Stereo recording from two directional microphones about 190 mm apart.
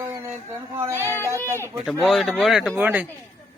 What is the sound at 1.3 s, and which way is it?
Speech, 15° right (ahead or behind).